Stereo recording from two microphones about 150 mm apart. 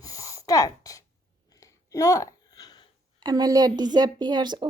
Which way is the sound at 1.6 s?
20° left (ahead or behind).